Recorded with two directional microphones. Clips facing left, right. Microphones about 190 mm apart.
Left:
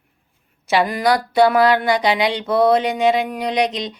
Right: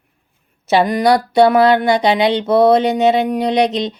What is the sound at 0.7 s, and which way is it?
Speech, 25° right (ahead or behind).